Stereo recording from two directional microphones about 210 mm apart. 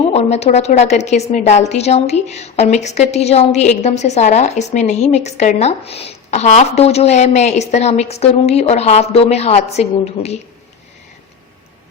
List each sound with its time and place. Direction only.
0.1 s a woman's voice: 30° left (ahead or behind)